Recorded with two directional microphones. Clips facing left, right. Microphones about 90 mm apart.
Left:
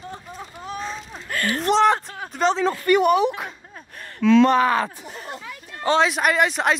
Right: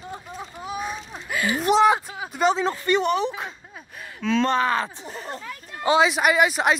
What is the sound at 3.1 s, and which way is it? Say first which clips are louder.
Speech: left 5 dB; 10° left (ahead or behind).